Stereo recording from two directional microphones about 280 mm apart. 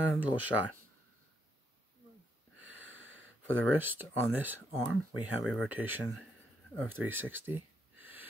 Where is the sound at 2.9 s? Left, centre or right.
Right.